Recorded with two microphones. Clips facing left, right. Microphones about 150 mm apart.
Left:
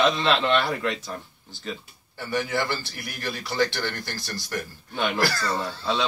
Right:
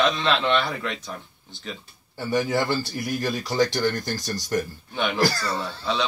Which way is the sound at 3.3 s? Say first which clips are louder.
Right 1 dB; 40° right (ahead or behind).